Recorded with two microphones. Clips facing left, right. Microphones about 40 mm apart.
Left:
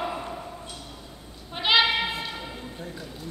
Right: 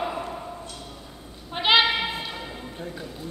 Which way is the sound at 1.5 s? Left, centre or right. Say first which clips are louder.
Right 2 dB; centre.